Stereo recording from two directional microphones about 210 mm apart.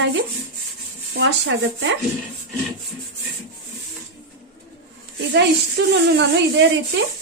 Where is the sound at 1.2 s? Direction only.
60° right (ahead or behind).